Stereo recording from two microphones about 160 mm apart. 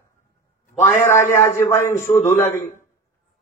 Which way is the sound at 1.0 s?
15° left (ahead or behind).